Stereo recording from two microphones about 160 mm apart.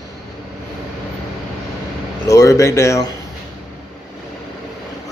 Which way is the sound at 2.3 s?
20° left (ahead or behind).